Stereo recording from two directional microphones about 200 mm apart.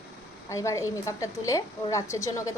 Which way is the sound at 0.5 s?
15° left (ahead or behind).